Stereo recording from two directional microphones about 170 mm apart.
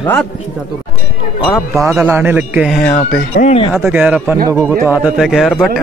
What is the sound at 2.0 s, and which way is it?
Speech, 15° right (ahead or behind).